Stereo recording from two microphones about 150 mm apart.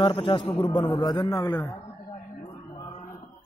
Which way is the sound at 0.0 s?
35° left (ahead or behind).